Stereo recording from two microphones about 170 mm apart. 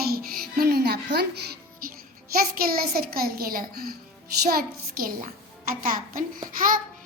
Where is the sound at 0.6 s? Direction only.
65° right (ahead or behind).